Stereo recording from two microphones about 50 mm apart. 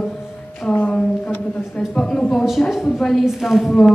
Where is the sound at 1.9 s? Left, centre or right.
Centre.